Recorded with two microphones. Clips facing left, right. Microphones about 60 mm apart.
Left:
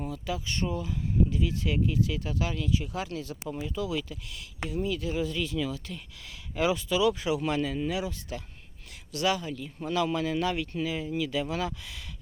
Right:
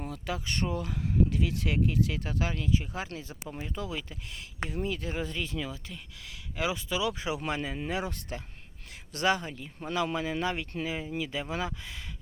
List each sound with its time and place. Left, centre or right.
0.0 s speech: right
3.6 s speech: right
5.9 s speech: centre
6.7 s speech: right
7.9 s speech: right